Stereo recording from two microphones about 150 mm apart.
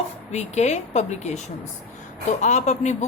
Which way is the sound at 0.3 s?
50° left (ahead or behind).